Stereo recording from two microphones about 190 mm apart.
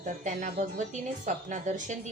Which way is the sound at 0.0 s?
40° right (ahead or behind).